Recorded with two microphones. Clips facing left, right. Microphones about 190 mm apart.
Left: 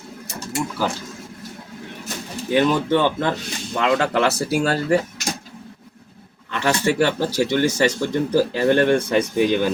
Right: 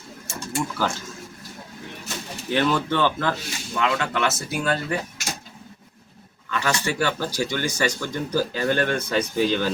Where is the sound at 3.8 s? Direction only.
35° left (ahead or behind).